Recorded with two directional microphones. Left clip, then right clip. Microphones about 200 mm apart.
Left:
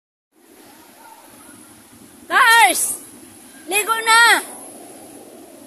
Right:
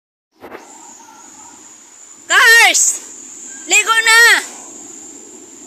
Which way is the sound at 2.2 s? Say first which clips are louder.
Right 4 dB; 5° left (ahead or behind).